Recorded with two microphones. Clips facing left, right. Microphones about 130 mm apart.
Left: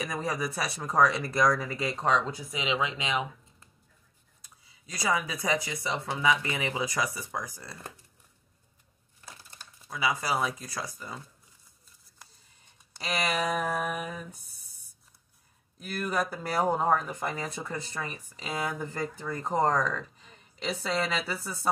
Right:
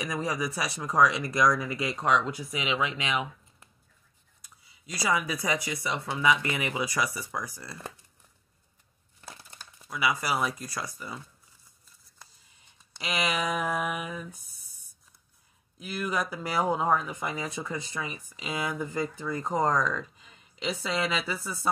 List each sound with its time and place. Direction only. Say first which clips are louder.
0.0 s speech: right 1 dB; 50° left (ahead or behind)
0.8 s speech: right 1 dB; 30° left (ahead or behind)
5.4 s speech: even; 25° left (ahead or behind)
9.8 s speech: right 1 dB; 25° left (ahead or behind)
12.9 s speech: even; 35° left (ahead or behind)
15.9 s speech: even; 55° left (ahead or behind)
19.7 s speech: right 1 dB; 35° left (ahead or behind)
20.5 s speech: even; 45° left (ahead or behind)